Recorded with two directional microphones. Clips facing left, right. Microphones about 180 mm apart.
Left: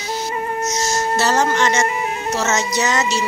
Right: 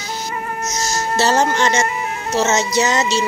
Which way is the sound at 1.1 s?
30° right (ahead or behind).